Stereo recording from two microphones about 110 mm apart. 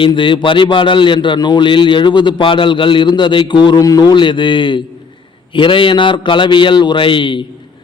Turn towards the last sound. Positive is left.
turn(degrees=50)  # may be behind; listen again after turning